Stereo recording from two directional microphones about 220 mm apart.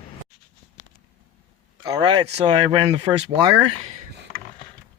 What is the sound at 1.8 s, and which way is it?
Speech, 20° right (ahead or behind).